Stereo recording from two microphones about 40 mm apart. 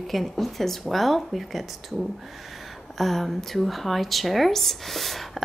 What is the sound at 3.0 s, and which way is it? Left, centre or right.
Speech, centre.